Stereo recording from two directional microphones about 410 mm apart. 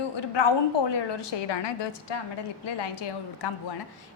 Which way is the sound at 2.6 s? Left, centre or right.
Left.